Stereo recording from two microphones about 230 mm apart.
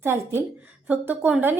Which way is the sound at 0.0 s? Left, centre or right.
Centre.